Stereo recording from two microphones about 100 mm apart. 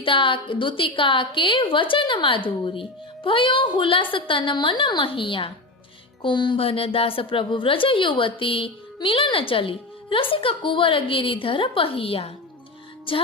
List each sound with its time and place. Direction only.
0.0 s a woman's voice: 60° left (ahead or behind)